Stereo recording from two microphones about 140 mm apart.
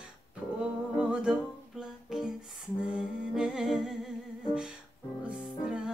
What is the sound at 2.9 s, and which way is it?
Humming, 5° right (ahead or behind).